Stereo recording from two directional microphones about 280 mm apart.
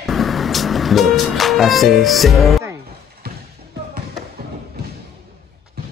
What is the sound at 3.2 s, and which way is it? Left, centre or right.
Basketball bounce, right.